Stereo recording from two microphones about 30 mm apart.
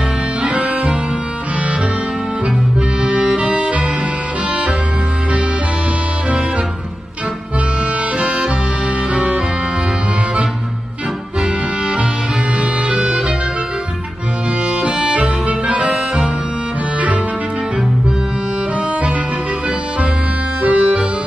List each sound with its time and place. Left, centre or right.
3.0 s accordion: right
3.3 s music: right
12.9 s music: right
14.7 s music: right
20.6 s music: right